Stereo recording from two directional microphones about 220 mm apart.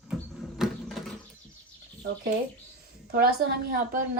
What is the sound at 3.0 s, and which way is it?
Speech, 40° right (ahead or behind).